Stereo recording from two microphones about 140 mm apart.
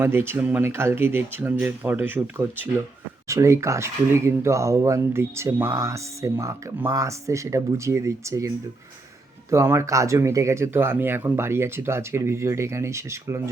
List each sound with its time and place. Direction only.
0.0 s speech: 15° right (ahead or behind)